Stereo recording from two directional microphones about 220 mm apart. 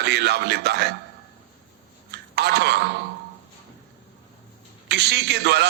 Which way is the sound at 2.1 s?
50° right (ahead or behind).